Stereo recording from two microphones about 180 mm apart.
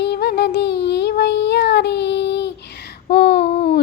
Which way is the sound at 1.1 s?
70° left (ahead or behind).